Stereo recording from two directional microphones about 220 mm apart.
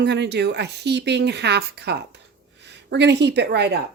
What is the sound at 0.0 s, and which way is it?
A child's voice, 50° right (ahead or behind).